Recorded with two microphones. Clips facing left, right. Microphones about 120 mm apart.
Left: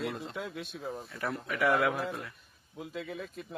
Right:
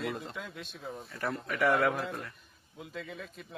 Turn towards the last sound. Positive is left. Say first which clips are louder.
# left 4 dB
turn(degrees=0)  # may be behind; listen again after turning